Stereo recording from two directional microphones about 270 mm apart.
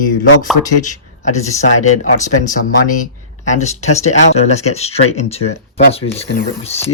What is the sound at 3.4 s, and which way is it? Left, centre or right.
Speech, left.